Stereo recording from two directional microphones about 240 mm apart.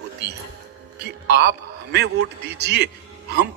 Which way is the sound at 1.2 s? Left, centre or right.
Right.